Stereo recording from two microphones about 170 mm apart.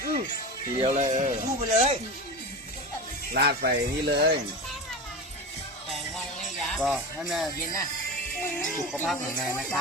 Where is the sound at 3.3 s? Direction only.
70° right (ahead or behind).